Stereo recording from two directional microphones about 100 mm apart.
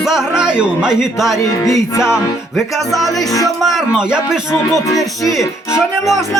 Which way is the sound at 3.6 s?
5° right (ahead or behind).